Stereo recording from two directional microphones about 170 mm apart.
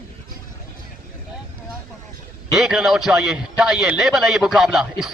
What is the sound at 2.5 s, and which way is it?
A man's voice, centre (ahead or behind).